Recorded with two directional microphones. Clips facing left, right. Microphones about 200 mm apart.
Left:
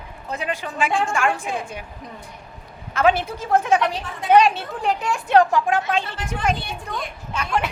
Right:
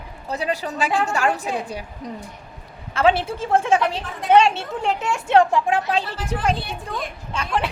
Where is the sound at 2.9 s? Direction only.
30° right (ahead or behind).